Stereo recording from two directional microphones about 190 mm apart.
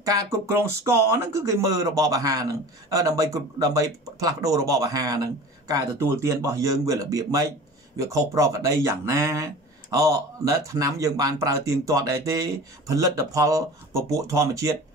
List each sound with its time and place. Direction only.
0.0 s speech: 15° right (ahead or behind)